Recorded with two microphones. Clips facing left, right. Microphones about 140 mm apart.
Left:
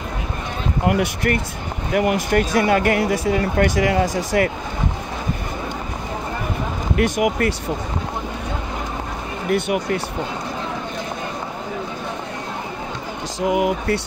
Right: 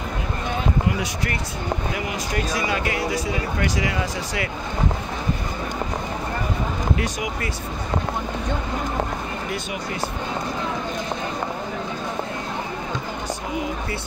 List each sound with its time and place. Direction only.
0.8 s speech: 60° left (ahead or behind)
7.0 s speech: 60° left (ahead or behind)
13.4 s speech: 80° left